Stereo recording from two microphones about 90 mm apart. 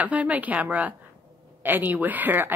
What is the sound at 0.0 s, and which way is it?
A woman's voice, 15° right (ahead or behind).